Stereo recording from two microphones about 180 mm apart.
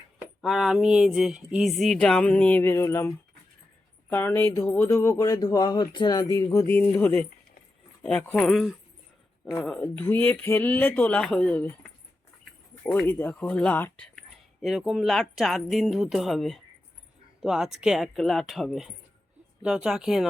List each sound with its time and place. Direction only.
0.4 s speech: centre (ahead or behind)
9.4 s speech: 15° left (ahead or behind)
9.6 s speech: 5° left (ahead or behind)